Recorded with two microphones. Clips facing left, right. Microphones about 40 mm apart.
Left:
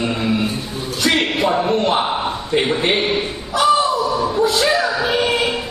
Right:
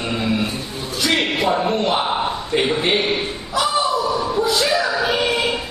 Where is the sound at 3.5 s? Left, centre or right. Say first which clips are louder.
Left 4 dB; left.